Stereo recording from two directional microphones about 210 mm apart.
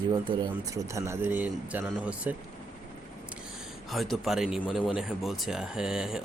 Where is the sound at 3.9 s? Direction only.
Centre (ahead or behind).